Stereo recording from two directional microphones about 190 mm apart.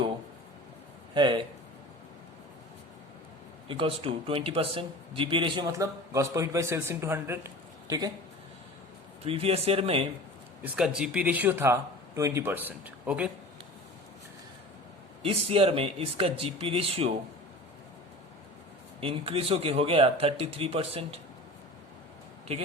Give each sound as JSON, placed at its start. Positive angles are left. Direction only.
{"t": 1.1, "sound": "speech", "side_deg": -25}
{"t": 3.7, "sound": "speech", "side_deg": -30}
{"t": 9.2, "sound": "speech", "side_deg": -30}
{"t": 10.6, "sound": "speech", "side_deg": -5}
{"t": 15.2, "sound": "speech", "side_deg": -30}
{"t": 18.9, "sound": "speech", "side_deg": -30}
{"t": 22.5, "sound": "speech", "side_deg": -30}